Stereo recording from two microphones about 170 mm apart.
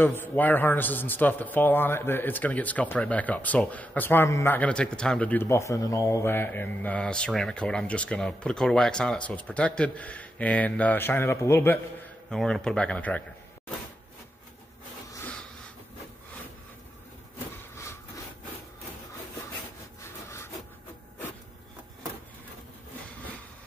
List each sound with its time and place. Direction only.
0.0 s a man's voice: 10° left (ahead or behind)
12.3 s speech: centre (ahead or behind)
20.0 s sawing: 15° left (ahead or behind)